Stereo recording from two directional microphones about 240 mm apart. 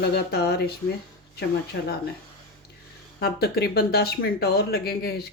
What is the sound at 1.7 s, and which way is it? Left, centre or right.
Speech, left.